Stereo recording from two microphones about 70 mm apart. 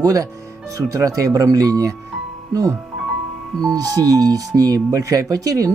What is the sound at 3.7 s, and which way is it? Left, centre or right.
Speech, right.